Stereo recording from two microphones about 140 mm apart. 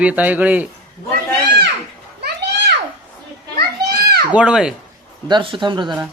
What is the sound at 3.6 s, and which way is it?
Children playing, 90° right.